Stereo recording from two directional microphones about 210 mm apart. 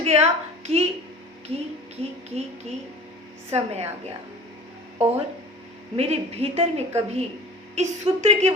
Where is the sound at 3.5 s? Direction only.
30° right (ahead or behind).